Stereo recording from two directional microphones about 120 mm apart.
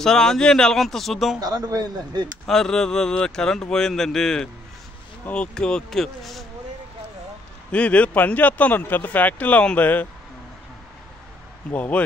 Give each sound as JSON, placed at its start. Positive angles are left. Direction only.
{"t": 0.0, "sound": "speech", "side_deg": 5}
{"t": 1.4, "sound": "speech", "side_deg": -30}
{"t": 2.4, "sound": "speech", "side_deg": 5}
{"t": 7.7, "sound": "speech", "side_deg": 10}
{"t": 11.7, "sound": "speech", "side_deg": 15}